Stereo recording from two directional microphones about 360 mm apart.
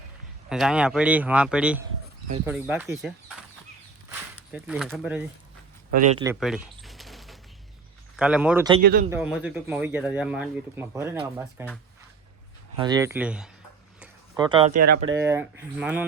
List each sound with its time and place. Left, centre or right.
0.5 s speech: centre
4.5 s speech: centre
5.9 s speech: centre
6.4 s a sound: centre
8.1 s speech: centre
8.8 s speech: right
9.0 s speech: centre
12.7 s speech: centre
14.0 s a sound: centre
15.1 s speech: centre